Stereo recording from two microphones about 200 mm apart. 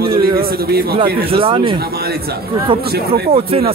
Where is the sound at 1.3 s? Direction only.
25° right (ahead or behind).